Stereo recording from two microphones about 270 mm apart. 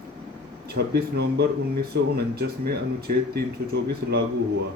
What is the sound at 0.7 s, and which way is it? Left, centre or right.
Speech, right.